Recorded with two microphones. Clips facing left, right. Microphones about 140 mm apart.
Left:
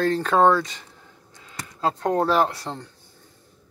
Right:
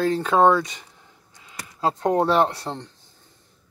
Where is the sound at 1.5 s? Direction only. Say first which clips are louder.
Right 1 dB; 20° right (ahead or behind).